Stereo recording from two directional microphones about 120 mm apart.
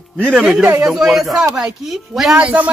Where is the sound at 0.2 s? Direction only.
5° right (ahead or behind).